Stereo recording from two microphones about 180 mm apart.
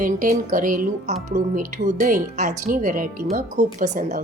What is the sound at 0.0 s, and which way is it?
Speech, 50° right (ahead or behind).